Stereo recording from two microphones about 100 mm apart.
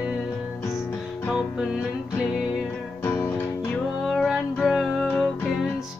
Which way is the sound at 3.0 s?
20° left (ahead or behind).